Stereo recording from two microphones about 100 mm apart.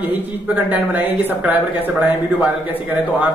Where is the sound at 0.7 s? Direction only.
15° right (ahead or behind).